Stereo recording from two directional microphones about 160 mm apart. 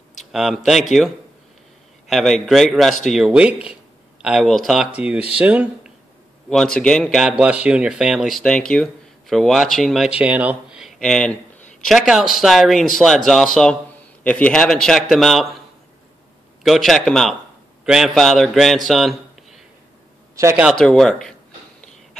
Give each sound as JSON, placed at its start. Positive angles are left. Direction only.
{"t": 0.3, "sound": "speech", "side_deg": 0}
{"t": 6.5, "sound": "speech", "side_deg": 5}
{"t": 16.6, "sound": "speech", "side_deg": 0}
{"t": 18.9, "sound": "a sound", "side_deg": 0}
{"t": 20.3, "sound": "a man's voice", "side_deg": -15}
{"t": 20.6, "sound": "speech", "side_deg": 5}